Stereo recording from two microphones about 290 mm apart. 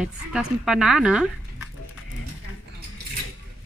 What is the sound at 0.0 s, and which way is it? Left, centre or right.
Speech, centre.